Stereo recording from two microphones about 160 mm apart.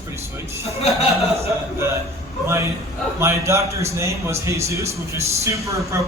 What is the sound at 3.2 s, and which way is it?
A man's voice, 15° right (ahead or behind).